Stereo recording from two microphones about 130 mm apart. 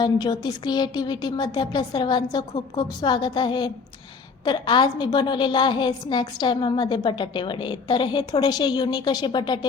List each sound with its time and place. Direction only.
0.0 s a woman's voice: 30° left (ahead or behind)